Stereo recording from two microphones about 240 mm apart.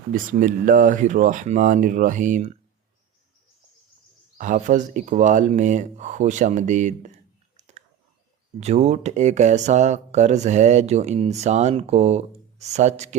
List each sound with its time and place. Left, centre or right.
0.1 s speech: right
4.4 s speech: right
8.5 s speech: right